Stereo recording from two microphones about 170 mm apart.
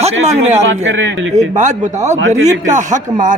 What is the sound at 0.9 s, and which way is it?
Speech, 90° right.